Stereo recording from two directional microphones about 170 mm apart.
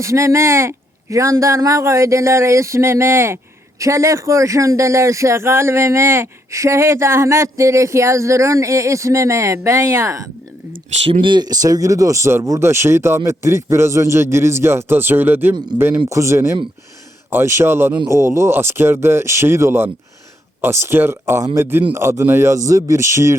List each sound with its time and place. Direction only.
0.0 s speech: 15° right (ahead or behind)
11.0 s speech: 30° right (ahead or behind); by 23.3 s 15° right (ahead or behind)